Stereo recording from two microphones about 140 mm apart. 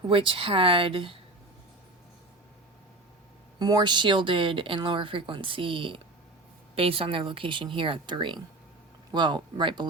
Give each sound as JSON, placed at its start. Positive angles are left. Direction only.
{"t": 0.1, "sound": "speech", "side_deg": -40}
{"t": 3.6, "sound": "speech", "side_deg": -30}